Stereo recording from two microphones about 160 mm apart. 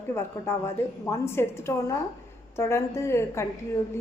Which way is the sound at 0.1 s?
15° left (ahead or behind).